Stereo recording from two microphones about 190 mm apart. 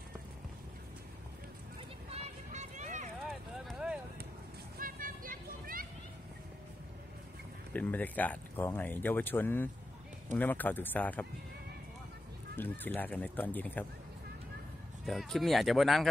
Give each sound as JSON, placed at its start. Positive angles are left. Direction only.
{"t": 2.0, "sound": "a sound", "side_deg": -35}
{"t": 3.2, "sound": "a sound", "side_deg": 0}
{"t": 4.7, "sound": "vehicle", "side_deg": -45}
{"t": 7.7, "sound": "speech", "side_deg": 10}
{"t": 12.5, "sound": "speech", "side_deg": 10}
{"t": 15.0, "sound": "speech", "side_deg": 0}